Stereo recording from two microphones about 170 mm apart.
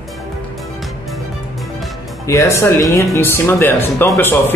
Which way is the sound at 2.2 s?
20° left (ahead or behind).